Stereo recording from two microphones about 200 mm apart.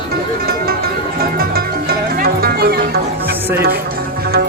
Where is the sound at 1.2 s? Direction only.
50° right (ahead or behind).